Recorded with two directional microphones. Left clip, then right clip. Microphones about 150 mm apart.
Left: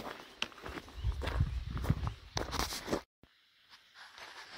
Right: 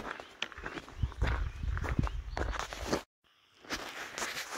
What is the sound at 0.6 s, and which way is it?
Walk, 15° right (ahead or behind).